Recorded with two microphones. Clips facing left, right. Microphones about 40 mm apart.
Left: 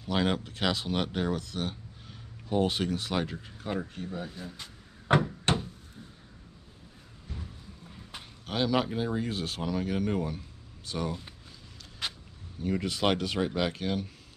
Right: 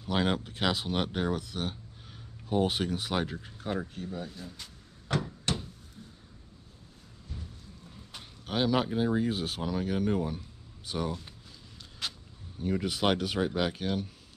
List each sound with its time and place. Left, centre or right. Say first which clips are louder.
0.0 s speech: even; centre
5.0 s door: left 6 dB; left
6.0 s a sound: even; centre
8.5 s speech: even; centre
12.0 s a sound: left 2 dB; centre
12.8 s speech: even; centre